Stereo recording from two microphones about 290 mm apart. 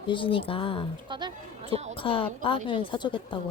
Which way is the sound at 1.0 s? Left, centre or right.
Centre.